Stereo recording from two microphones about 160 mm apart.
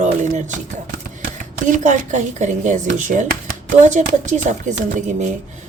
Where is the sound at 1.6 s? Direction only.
50° right (ahead or behind).